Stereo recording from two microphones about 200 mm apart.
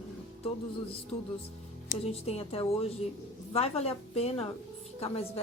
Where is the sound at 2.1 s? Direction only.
30° left (ahead or behind).